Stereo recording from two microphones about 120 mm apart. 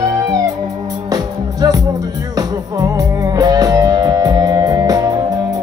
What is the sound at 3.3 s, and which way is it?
Music, 30° right (ahead or behind).